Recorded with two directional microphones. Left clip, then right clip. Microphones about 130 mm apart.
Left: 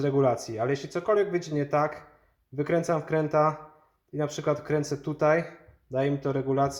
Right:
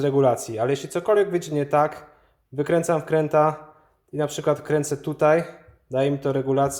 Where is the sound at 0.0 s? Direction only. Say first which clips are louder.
Right 5 dB; 20° right (ahead or behind).